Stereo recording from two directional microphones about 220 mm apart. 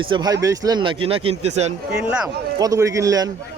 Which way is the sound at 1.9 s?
5° right (ahead or behind).